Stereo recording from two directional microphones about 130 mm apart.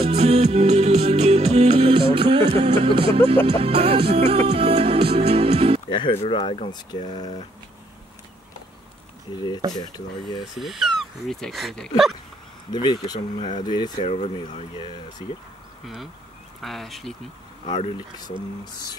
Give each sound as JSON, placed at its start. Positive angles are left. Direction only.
{"t": 0.0, "sound": "music", "side_deg": -55}
{"t": 5.9, "sound": "speech", "side_deg": 40}
{"t": 9.8, "sound": "speech", "side_deg": 30}
{"t": 10.4, "sound": "speech", "side_deg": 0}
{"t": 12.7, "sound": "speech", "side_deg": 35}
{"t": 14.0, "sound": "speech", "side_deg": 60}
{"t": 14.4, "sound": "speech", "side_deg": 40}
{"t": 15.8, "sound": "speech", "side_deg": 0}